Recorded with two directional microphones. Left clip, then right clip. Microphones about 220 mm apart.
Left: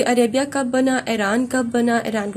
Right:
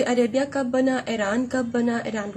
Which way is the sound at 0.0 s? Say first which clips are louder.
Left 4 dB; 40° left (ahead or behind).